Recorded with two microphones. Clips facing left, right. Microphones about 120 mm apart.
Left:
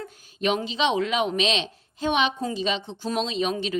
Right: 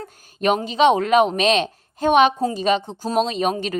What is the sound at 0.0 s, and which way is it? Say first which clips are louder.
Speech: right 5 dB; 45° right (ahead or behind).